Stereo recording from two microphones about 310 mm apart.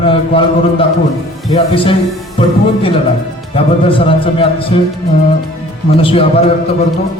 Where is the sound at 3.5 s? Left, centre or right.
Centre.